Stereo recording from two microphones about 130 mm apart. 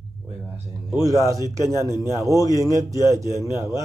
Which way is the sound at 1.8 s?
20° right (ahead or behind).